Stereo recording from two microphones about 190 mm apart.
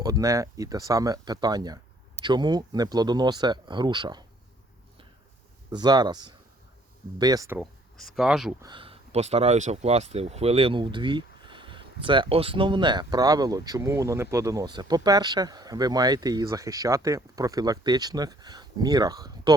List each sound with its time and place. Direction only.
0.0 s speech: 20° right (ahead or behind)
5.7 s speech: 20° right (ahead or behind)
7.6 s speech: centre (ahead or behind)
8.6 s speech: 25° right (ahead or behind)